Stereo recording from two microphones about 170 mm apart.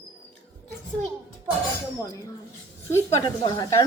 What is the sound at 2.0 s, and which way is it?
Speech, 20° left (ahead or behind).